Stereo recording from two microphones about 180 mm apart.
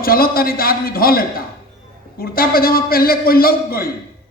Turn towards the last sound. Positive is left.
turn(degrees=55)  # may be behind; listen again after turning